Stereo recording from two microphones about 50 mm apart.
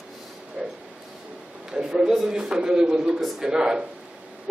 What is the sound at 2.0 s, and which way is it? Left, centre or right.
A man's voice, centre.